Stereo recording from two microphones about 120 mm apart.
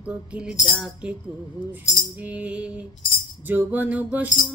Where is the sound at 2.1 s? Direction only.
10° right (ahead or behind).